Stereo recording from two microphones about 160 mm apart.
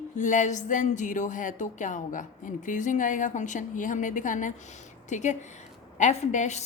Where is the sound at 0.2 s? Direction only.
50° left (ahead or behind).